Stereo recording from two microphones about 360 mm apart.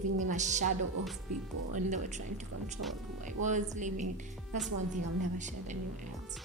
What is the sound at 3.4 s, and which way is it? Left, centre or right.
Speech, centre.